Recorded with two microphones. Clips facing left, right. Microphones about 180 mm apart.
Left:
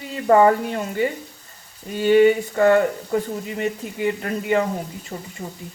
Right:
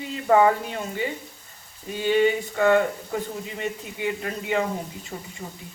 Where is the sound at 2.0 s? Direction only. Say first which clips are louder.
Left 6 dB; 50° left (ahead or behind).